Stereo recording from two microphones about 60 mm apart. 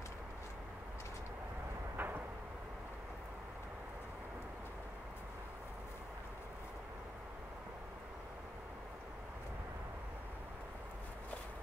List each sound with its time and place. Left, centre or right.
2.0 s vehicle: right